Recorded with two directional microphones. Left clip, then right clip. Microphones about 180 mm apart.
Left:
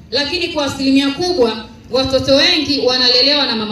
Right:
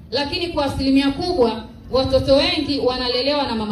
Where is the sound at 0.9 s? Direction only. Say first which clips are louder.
Left 6 dB; 55° left (ahead or behind).